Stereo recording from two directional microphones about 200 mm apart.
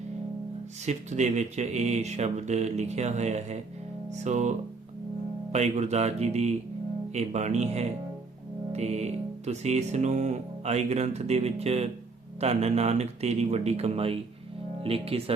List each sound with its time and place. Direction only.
0.9 s speech: 35° right (ahead or behind)